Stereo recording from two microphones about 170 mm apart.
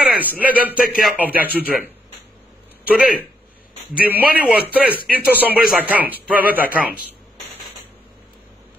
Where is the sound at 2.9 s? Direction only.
5° right (ahead or behind).